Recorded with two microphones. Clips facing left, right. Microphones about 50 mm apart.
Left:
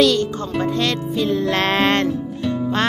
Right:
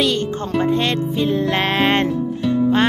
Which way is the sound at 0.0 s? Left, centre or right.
Right.